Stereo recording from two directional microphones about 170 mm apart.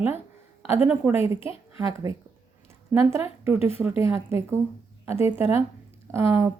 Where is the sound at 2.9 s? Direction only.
15° right (ahead or behind).